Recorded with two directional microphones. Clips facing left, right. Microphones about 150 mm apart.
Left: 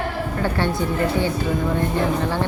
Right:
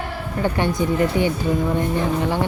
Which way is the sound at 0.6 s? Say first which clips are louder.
Right 3 dB; 15° right (ahead or behind).